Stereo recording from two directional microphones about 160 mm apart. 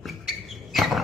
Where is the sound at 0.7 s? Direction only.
Centre (ahead or behind).